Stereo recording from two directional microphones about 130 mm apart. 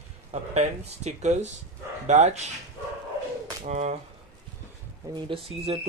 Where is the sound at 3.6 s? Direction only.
65° right (ahead or behind).